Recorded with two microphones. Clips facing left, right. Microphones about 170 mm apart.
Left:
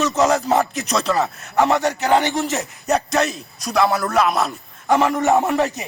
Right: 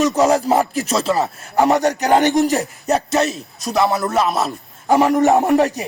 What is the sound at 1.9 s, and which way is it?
Speech, 40° right (ahead or behind).